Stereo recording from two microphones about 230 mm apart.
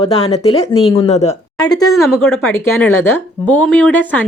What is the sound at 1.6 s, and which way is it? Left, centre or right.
Speech, centre.